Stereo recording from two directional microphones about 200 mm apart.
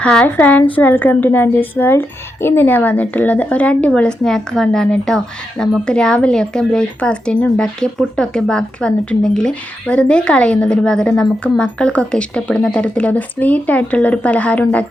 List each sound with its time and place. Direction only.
0.0 s a woman's voice: 5° left (ahead or behind)